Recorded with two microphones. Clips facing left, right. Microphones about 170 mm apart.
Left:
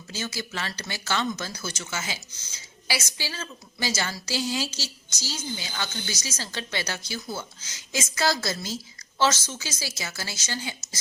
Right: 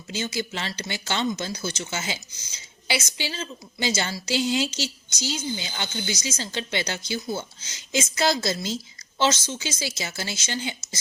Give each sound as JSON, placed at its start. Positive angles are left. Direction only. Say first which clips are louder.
{"t": 0.1, "sound": "speech", "louder": "right 4 dB", "side_deg": -20}